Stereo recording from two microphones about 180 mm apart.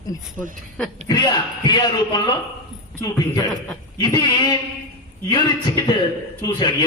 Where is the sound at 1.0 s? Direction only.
25° left (ahead or behind).